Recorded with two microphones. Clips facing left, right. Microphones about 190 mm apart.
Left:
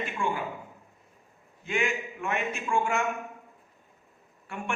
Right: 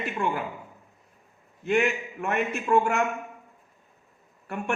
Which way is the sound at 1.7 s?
60° right (ahead or behind).